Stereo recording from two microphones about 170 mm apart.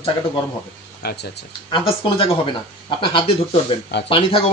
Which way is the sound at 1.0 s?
75° left (ahead or behind).